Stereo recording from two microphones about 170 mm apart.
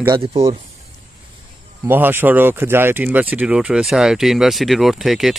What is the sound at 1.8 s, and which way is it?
Speech, 10° right (ahead or behind).